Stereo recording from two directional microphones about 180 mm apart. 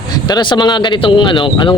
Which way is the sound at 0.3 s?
25° left (ahead or behind).